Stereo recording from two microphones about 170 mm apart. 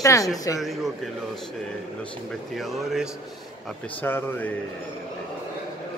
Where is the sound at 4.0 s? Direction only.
10° left (ahead or behind).